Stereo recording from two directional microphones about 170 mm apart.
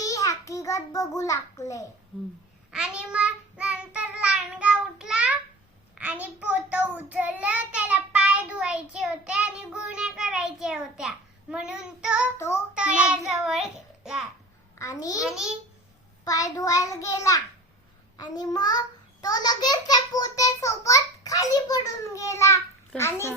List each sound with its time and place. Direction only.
0.0 s a child's voice: 20° left (ahead or behind)
2.7 s child singing: 5° right (ahead or behind)
5.9 s a child's voice: 10° right (ahead or behind)
14.8 s a child's voice: 20° left (ahead or behind)
15.2 s a child's voice: 5° right (ahead or behind)
16.2 s a child's voice: 20° left (ahead or behind)